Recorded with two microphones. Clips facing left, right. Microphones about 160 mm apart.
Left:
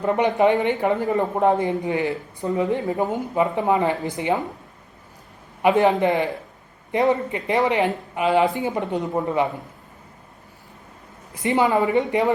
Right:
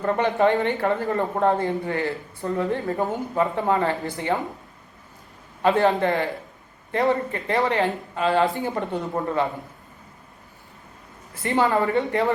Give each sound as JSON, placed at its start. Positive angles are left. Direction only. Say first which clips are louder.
{"t": 0.0, "sound": "speech", "louder": "left 2 dB", "side_deg": 15}
{"t": 5.6, "sound": "speech", "louder": "left 2 dB", "side_deg": 15}
{"t": 11.4, "sound": "speech", "louder": "left 2 dB", "side_deg": 15}